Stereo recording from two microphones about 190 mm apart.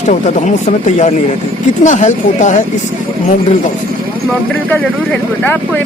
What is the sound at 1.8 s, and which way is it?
Speech, 40° left (ahead or behind).